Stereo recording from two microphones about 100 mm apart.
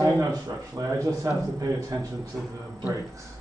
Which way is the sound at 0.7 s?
30° right (ahead or behind).